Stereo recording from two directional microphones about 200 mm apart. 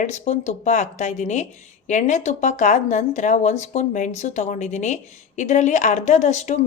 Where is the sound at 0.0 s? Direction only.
35° left (ahead or behind).